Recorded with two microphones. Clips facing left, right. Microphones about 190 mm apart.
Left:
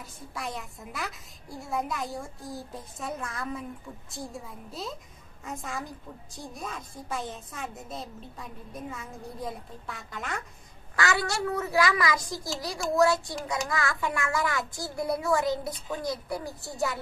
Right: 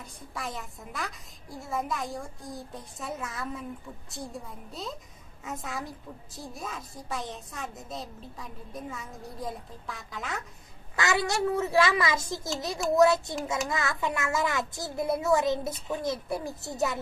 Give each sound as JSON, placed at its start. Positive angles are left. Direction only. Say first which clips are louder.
{"t": 0.0, "sound": "a woman's voice", "louder": "left 1 dB", "side_deg": 0}
{"t": 11.0, "sound": "a child's voice", "louder": "right 1 dB", "side_deg": -20}